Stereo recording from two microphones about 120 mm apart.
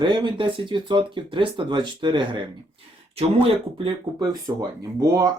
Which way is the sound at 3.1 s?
55° right (ahead or behind).